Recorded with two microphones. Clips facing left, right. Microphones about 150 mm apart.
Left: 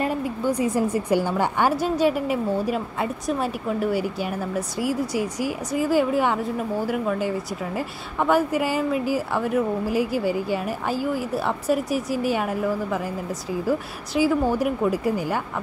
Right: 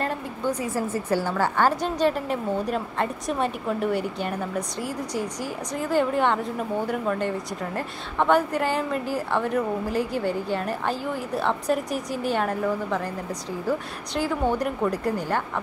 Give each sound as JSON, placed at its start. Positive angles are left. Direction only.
{"t": 0.0, "sound": "a woman's voice", "side_deg": 10}